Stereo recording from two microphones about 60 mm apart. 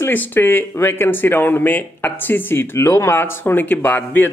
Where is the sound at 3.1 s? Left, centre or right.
Left.